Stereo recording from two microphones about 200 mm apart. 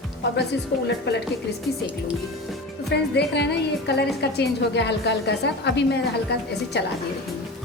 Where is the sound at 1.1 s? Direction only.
60° left (ahead or behind).